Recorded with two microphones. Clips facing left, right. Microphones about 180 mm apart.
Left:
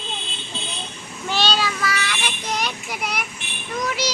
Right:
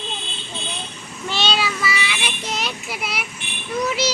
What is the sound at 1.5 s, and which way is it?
Child singing, 10° right (ahead or behind).